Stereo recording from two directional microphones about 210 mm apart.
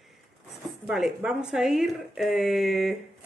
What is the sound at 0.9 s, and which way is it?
Speech, centre (ahead or behind).